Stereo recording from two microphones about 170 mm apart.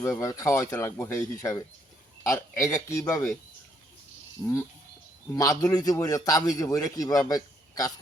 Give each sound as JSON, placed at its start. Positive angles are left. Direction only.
{"t": 0.0, "sound": "speech", "side_deg": 15}
{"t": 5.3, "sound": "a man's voice", "side_deg": 15}